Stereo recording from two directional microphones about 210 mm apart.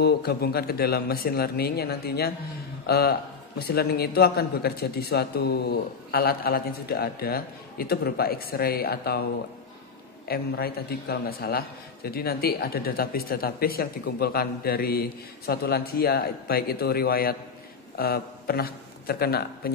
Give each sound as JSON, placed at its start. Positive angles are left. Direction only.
{"t": 0.0, "sound": "a man's voice", "side_deg": 50}
{"t": 10.2, "sound": "a man's voice", "side_deg": 45}